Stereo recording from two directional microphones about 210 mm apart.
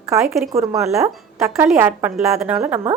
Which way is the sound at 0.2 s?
Centre (ahead or behind).